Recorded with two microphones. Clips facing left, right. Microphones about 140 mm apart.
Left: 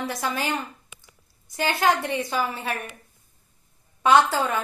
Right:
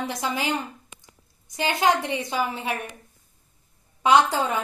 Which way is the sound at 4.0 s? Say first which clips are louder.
Even; 20° right (ahead or behind).